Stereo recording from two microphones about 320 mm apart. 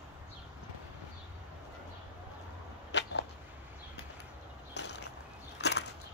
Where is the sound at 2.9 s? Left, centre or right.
Left.